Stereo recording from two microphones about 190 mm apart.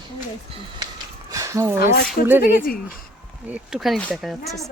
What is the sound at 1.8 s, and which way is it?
Speech, 55° left (ahead or behind).